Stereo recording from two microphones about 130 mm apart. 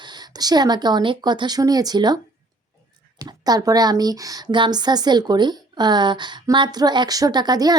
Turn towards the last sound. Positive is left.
turn(degrees=-30)  # may be behind; listen again after turning